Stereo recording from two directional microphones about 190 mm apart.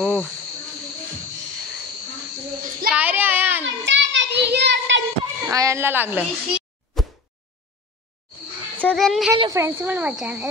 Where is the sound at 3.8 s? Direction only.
70° right (ahead or behind).